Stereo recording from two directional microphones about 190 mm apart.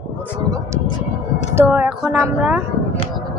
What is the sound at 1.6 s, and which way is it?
Speech, 10° right (ahead or behind).